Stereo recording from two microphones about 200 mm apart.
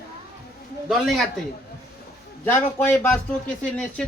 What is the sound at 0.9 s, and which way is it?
Speech, centre (ahead or behind).